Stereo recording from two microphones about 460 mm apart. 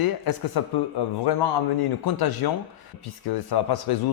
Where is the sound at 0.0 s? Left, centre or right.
Left.